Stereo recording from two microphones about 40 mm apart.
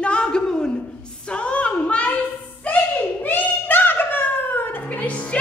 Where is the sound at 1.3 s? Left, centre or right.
Left.